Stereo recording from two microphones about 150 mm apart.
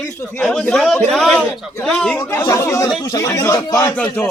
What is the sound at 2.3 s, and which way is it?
Speech, 20° left (ahead or behind).